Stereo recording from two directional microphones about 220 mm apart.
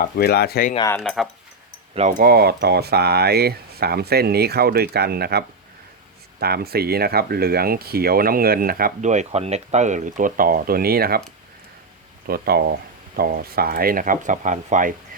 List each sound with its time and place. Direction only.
0.0 s speech: 45° left (ahead or behind)
0.9 s speech: 10° left (ahead or behind)
2.0 s speech: 35° right (ahead or behind)
12.2 s speech: 45° right (ahead or behind)